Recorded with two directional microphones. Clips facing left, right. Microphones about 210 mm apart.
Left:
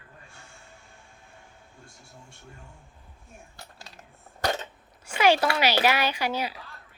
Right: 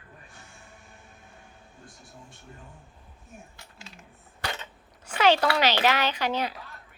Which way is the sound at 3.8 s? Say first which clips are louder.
Even; 40° left (ahead or behind).